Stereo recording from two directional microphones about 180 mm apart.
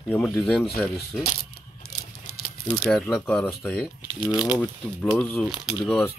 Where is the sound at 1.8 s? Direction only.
60° left (ahead or behind).